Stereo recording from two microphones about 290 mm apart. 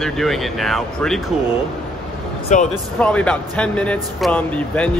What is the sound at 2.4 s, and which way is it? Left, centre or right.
Speech, left.